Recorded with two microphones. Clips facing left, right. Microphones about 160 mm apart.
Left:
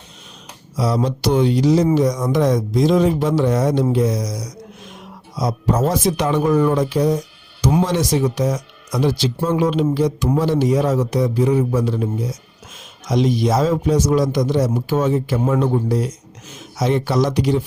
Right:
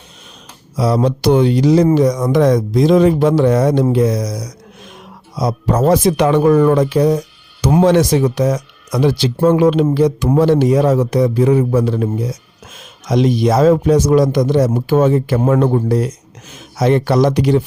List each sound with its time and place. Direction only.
0.8 s speech: 60° right (ahead or behind)